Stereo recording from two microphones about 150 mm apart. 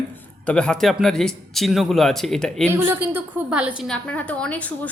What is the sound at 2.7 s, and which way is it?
A woman's voice, 15° right (ahead or behind).